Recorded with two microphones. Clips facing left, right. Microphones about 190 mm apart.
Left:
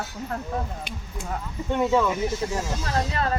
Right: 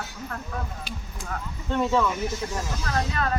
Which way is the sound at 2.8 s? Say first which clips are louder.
Even; 30° left (ahead or behind).